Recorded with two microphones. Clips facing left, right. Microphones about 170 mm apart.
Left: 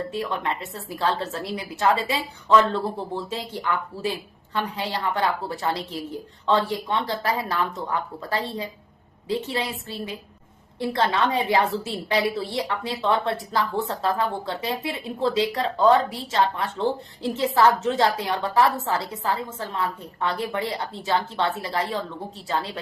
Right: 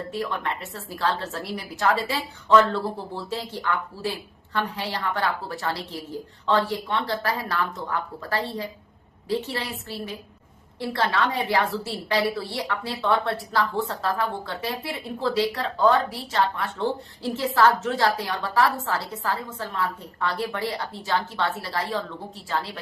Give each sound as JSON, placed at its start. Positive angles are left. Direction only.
{"t": 0.1, "sound": "a woman's voice", "side_deg": 20}